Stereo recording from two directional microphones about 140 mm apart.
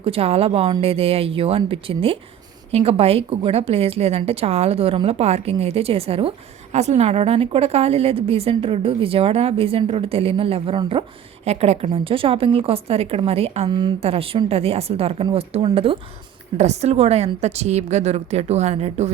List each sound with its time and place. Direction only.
0.0 s a woman's voice: 45° right (ahead or behind)
13.7 s a woman's voice: 35° right (ahead or behind); by 19.1 s 50° right (ahead or behind)